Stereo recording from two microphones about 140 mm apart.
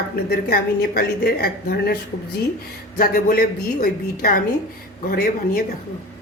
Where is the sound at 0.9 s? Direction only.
90° left.